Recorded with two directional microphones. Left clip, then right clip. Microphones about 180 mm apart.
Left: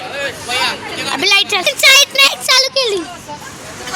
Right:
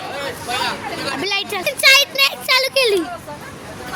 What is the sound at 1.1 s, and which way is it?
Speech, 10° left (ahead or behind).